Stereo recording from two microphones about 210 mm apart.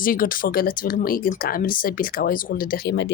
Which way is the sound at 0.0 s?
40° left (ahead or behind).